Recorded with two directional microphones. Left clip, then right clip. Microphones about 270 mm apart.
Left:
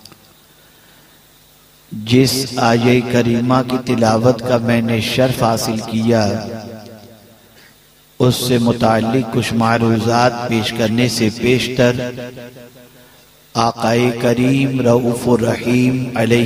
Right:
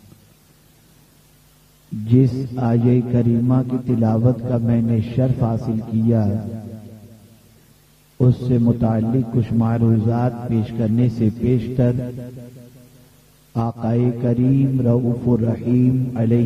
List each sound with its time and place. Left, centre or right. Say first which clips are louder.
2.5 s a man's voice: left 7 dB; centre
8.2 s a man's voice: left 6 dB; left
8.7 s a man's voice: left 7 dB; centre
13.5 s a man's voice: left 10 dB; centre
13.9 s a man's voice: left 6 dB; centre